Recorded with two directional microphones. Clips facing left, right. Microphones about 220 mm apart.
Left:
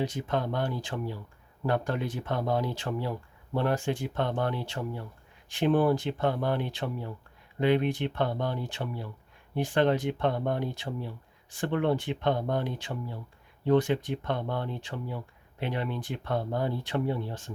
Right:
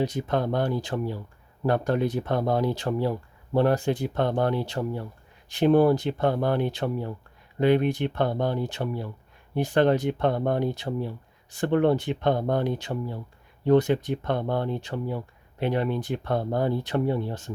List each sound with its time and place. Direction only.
0.0 s speech: 40° right (ahead or behind)